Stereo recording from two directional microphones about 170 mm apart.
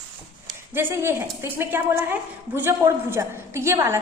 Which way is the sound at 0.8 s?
15° right (ahead or behind).